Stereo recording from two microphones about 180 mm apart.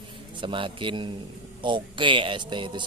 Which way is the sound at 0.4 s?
25° right (ahead or behind).